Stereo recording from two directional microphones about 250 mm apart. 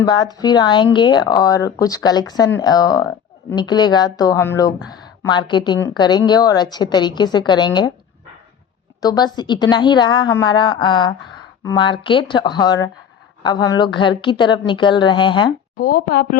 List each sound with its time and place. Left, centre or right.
0.1 s speech: centre
9.0 s a woman's voice: centre
15.8 s a woman's voice: left